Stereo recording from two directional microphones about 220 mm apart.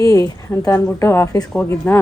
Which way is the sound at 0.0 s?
15° left (ahead or behind).